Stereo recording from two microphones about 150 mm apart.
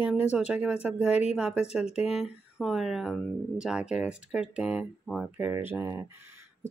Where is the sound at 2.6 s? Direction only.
Centre (ahead or behind).